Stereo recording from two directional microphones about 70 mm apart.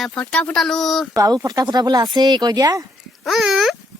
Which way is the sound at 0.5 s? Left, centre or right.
Centre.